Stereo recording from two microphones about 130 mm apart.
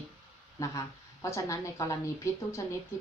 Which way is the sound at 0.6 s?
25° left (ahead or behind).